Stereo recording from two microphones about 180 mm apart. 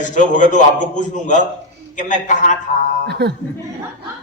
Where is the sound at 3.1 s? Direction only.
65° right (ahead or behind).